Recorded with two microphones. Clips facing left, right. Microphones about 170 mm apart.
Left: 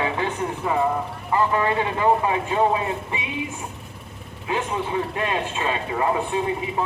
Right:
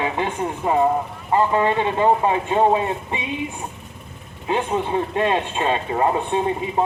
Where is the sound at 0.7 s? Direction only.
30° right (ahead or behind).